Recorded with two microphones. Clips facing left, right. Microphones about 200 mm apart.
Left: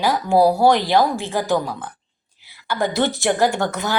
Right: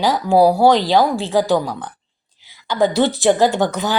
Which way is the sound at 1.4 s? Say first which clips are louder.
Right 4 dB; 15° right (ahead or behind).